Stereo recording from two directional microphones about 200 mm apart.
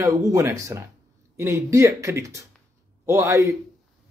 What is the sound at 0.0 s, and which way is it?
Speech, 15° right (ahead or behind).